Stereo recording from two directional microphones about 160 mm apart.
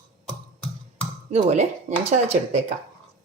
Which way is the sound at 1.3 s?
45° right (ahead or behind).